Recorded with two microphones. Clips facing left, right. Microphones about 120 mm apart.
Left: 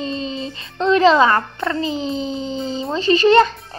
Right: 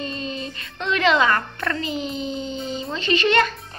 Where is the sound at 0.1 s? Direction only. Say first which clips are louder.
Left 5 dB; 25° left (ahead or behind).